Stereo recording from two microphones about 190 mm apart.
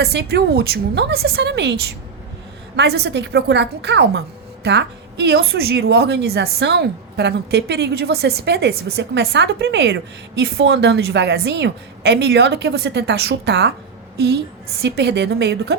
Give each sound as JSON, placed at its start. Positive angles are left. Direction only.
{"t": 0.0, "sound": "a woman's voice", "side_deg": -60}